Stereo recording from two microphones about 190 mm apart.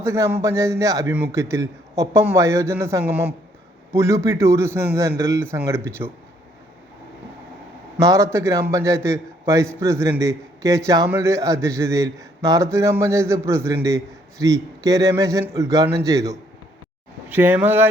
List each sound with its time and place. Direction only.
0.0 s a man's voice: 15° right (ahead or behind)
8.0 s a man's voice: 15° right (ahead or behind)